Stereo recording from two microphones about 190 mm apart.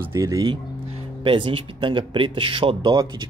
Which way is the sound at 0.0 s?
15° right (ahead or behind).